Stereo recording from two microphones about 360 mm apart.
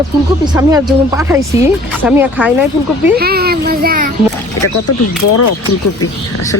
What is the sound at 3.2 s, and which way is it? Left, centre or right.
Speech, right.